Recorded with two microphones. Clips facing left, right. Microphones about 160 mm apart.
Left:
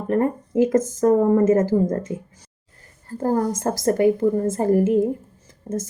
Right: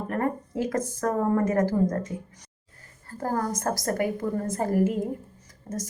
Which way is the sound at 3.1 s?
25° left (ahead or behind).